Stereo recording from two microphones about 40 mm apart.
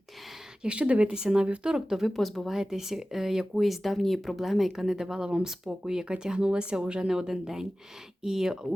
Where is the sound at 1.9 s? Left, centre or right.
Centre.